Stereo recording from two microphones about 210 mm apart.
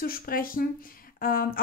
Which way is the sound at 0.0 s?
45° left (ahead or behind).